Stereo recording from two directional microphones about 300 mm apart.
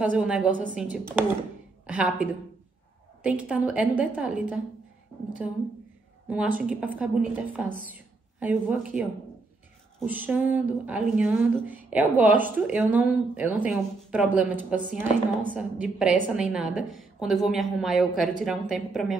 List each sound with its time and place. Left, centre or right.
0.0 s a woman's voice: centre
6.2 s a woman's voice: centre
7.9 s a sound: centre
9.9 s a woman's voice: centre